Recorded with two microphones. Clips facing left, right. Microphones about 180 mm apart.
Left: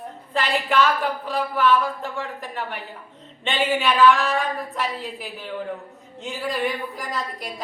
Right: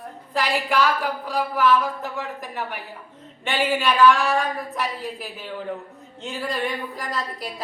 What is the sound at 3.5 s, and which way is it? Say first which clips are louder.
A woman's voice: even; centre (ahead or behind).